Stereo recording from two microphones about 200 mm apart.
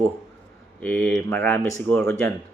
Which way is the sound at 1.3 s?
10° left (ahead or behind).